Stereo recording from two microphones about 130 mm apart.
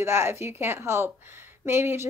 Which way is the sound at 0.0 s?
20° right (ahead or behind).